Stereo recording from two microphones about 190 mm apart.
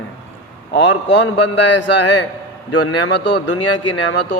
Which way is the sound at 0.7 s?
70° left (ahead or behind).